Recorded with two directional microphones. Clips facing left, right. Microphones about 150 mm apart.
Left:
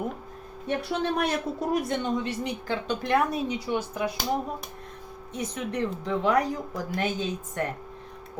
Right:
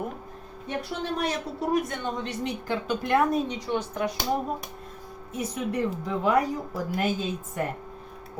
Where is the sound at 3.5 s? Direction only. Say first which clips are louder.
Even; 10° left (ahead or behind).